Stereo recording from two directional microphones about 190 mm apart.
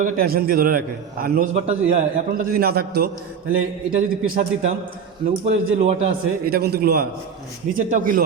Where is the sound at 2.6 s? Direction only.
55° right (ahead or behind).